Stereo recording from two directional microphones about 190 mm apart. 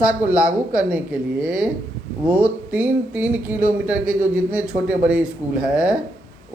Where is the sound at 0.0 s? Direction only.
5° right (ahead or behind).